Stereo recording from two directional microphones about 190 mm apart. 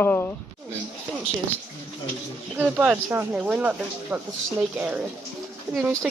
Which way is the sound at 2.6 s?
5° right (ahead or behind).